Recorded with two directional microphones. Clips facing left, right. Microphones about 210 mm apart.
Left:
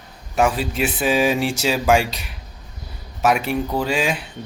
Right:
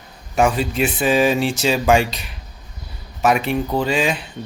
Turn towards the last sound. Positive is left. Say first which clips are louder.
# right 2 dB
turn(degrees=5)  # may be behind; listen again after turning